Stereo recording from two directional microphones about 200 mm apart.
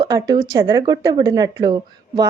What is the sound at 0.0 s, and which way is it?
A woman's voice, 20° right (ahead or behind).